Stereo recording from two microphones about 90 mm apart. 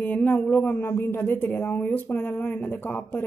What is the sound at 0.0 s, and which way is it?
A man's voice, 15° left (ahead or behind).